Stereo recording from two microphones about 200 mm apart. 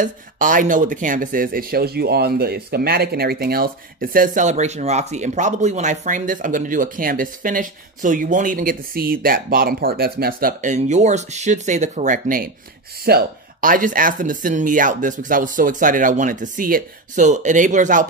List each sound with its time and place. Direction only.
0.0 s speech: 40° right (ahead or behind)